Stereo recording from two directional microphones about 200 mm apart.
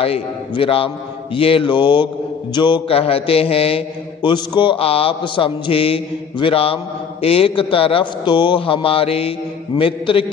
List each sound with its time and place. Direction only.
0.0 s a man's voice: 30° left (ahead or behind)